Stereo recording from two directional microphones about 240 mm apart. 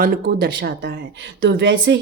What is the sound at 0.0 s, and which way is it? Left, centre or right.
Speech, right.